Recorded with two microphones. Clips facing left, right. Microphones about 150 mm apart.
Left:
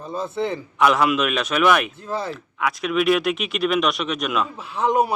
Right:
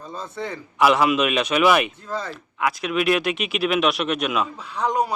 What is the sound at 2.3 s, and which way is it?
A man's voice, centre (ahead or behind).